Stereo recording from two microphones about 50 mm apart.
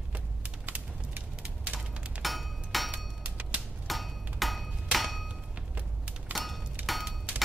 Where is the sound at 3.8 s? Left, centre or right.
Centre.